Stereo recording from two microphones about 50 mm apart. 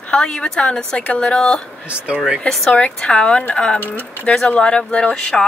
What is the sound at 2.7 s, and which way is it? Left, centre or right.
Speech, left.